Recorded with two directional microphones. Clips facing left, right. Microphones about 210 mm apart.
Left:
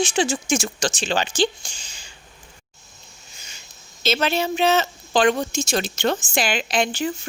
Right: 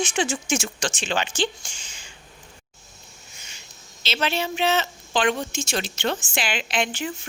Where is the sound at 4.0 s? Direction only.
45° left (ahead or behind).